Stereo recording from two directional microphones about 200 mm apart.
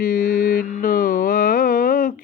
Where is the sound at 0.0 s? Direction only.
45° left (ahead or behind).